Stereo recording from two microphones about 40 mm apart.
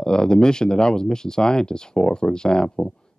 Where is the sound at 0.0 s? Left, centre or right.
Centre.